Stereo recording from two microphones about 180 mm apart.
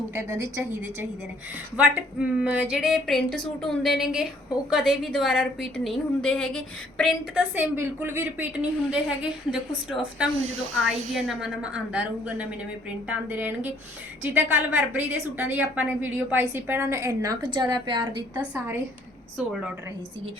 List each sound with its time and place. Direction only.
0.1 s a woman's voice: 15° right (ahead or behind)
1.7 s a woman's voice: 10° right (ahead or behind)
7.5 s a woman's voice: 10° right (ahead or behind)
10.4 s speech: 40° right (ahead or behind)
10.8 s a woman's voice: centre (ahead or behind); by 18.1 s 25° right (ahead or behind)
18.3 s a woman's voice: 10° right (ahead or behind)